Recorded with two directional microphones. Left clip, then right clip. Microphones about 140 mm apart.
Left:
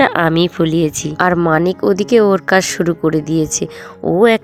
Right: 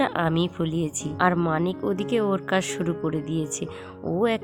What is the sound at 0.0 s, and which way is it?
Speech, 45° left (ahead or behind).